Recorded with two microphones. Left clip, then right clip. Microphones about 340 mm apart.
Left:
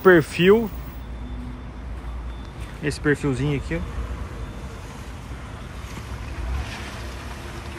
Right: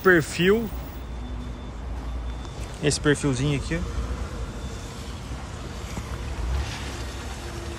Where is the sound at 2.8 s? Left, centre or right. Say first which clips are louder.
Even; centre.